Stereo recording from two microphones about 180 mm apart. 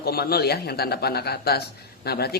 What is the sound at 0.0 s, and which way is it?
A man's voice, 60° left (ahead or behind).